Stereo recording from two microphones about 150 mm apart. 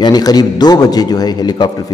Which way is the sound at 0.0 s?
25° left (ahead or behind).